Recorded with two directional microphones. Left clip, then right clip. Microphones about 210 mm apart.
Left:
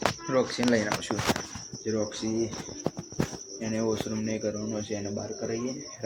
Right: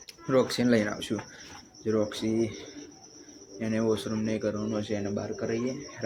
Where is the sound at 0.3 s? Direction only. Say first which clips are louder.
Right 4 dB; 25° right (ahead or behind).